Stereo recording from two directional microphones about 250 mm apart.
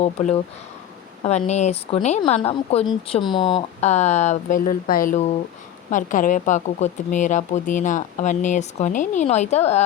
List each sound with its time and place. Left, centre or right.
0.0 s speech: left